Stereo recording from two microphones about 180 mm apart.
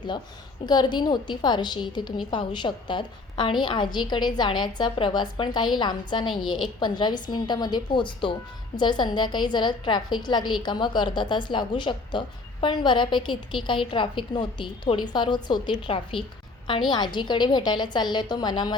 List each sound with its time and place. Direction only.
0.6 s a woman's voice: 25° left (ahead or behind)